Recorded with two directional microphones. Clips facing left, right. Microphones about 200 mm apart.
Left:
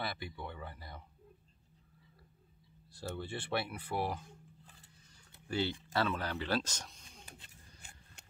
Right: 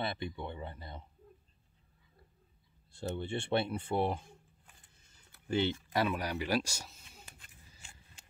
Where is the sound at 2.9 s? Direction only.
25° right (ahead or behind).